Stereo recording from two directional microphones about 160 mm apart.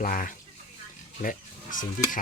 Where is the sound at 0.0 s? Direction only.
60° left (ahead or behind).